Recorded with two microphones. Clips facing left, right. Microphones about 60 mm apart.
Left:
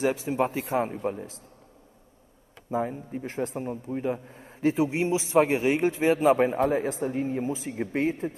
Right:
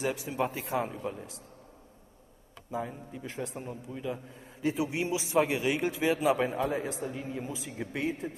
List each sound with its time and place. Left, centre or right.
0.0 s a man's voice: left
2.7 s a man's voice: left